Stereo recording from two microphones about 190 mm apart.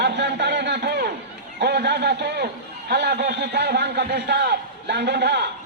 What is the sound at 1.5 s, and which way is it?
A man's voice, 60° right (ahead or behind).